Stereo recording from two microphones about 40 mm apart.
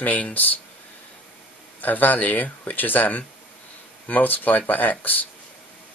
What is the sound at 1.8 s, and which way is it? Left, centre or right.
Speech, left.